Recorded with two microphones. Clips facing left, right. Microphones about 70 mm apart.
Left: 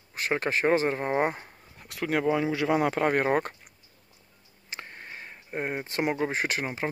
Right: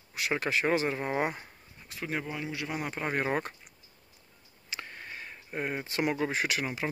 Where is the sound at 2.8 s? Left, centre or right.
Left.